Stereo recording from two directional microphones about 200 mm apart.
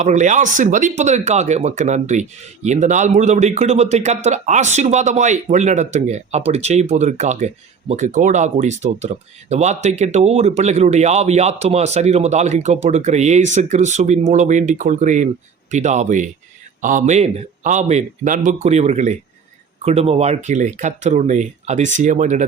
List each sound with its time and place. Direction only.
0.0 s speech: 35° right (ahead or behind)